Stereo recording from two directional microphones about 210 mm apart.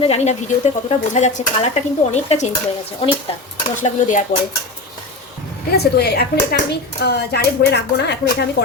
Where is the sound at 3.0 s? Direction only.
25° left (ahead or behind).